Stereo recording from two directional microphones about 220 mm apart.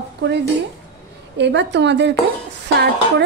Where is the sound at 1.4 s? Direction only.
55° right (ahead or behind).